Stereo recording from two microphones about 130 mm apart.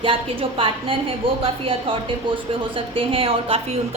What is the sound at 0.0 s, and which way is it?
A woman's voice, 45° right (ahead or behind).